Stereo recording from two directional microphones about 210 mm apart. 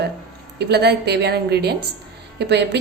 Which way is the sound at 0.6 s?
50° right (ahead or behind).